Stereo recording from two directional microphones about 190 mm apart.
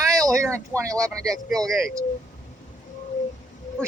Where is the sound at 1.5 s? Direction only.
Centre (ahead or behind).